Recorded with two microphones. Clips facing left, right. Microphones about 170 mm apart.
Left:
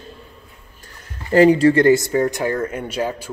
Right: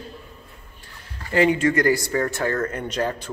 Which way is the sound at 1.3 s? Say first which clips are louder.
Left 7 dB; 35° left (ahead or behind).